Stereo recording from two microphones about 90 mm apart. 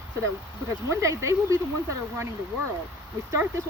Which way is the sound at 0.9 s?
35° right (ahead or behind).